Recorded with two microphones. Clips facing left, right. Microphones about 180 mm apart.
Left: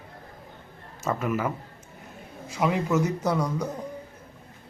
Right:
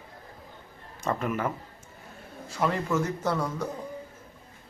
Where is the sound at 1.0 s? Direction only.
5° left (ahead or behind).